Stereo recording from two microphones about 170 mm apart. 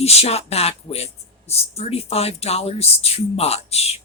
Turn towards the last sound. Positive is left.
turn(degrees=35)  # may be behind; listen again after turning